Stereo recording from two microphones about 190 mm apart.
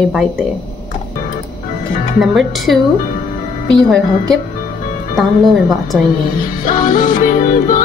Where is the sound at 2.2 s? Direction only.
Centre (ahead or behind).